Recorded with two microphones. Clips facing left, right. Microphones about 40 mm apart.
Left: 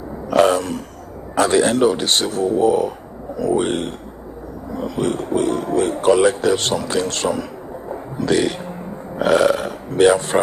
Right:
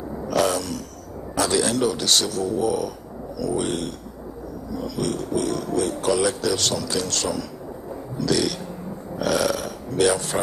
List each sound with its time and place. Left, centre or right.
0.3 s a sound: left
1.3 s speech: left
7.9 s burping: left